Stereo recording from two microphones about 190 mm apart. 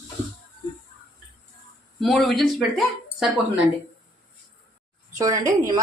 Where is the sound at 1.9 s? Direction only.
Centre (ahead or behind).